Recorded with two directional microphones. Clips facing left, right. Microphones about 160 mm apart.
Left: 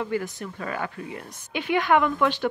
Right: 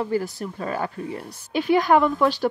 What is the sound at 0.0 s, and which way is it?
A woman's voice, 35° right (ahead or behind).